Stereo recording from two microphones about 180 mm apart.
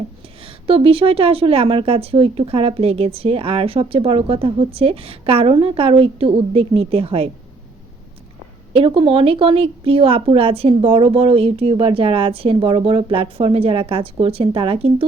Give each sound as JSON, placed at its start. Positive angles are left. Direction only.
{"t": 0.4, "sound": "a woman's voice", "side_deg": -30}
{"t": 8.7, "sound": "a woman's voice", "side_deg": -30}